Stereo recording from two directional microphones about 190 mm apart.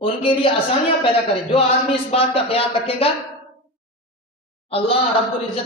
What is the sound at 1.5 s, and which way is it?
Speech, 30° left (ahead or behind).